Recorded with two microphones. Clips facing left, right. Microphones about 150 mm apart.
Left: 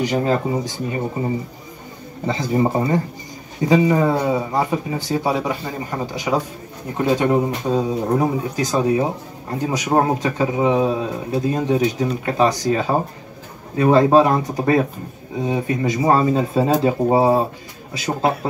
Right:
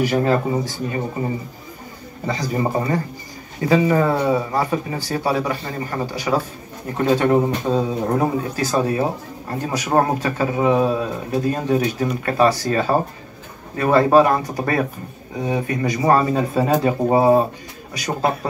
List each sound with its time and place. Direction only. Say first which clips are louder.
0.0 s speech: right 1 dB; 20° left (ahead or behind)
2.2 s speech: left 3 dB; 20° left (ahead or behind)